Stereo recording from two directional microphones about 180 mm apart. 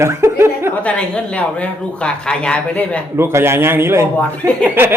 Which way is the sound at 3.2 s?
15° right (ahead or behind).